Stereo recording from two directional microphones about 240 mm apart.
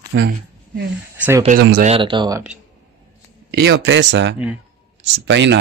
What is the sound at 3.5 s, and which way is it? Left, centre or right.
A man's voice, right.